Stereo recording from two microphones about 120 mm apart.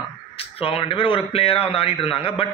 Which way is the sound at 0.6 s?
50° left (ahead or behind).